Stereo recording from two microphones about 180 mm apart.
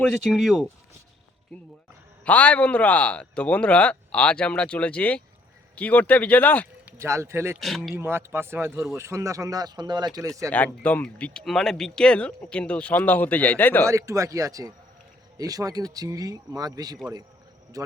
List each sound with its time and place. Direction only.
0.0 s speech: centre (ahead or behind)
2.2 s speech: 10° left (ahead or behind)
6.8 s speech: 15° right (ahead or behind)
7.6 s speech: centre (ahead or behind)
7.9 s speech: 15° right (ahead or behind)
10.5 s speech: 10° left (ahead or behind)
13.8 s a man's voice: 15° right (ahead or behind)